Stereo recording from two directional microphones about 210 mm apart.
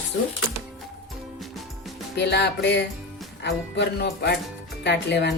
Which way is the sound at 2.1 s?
55° left (ahead or behind).